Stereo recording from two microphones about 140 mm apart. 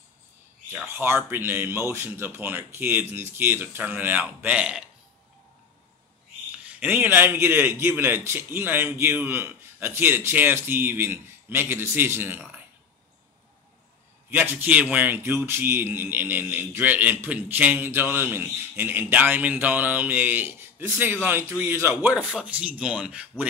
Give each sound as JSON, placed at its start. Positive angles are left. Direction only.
{"t": 0.8, "sound": "a man's voice", "side_deg": -15}
{"t": 6.8, "sound": "a man's voice", "side_deg": -10}
{"t": 14.3, "sound": "a man's voice", "side_deg": -15}